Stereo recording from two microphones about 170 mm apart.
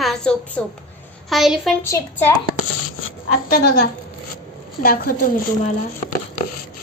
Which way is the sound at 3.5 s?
70° left (ahead or behind).